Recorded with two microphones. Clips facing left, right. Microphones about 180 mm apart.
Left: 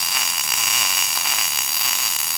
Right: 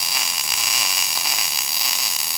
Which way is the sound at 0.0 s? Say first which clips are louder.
Left 1 dB; 5° right (ahead or behind).